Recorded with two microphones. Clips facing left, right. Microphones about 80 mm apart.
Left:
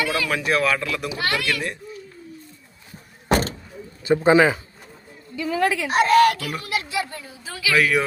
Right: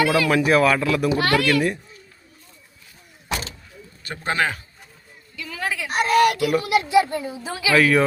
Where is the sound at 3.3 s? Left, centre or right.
Left.